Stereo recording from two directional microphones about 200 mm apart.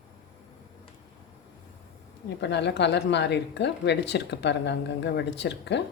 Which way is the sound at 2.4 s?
60° left (ahead or behind).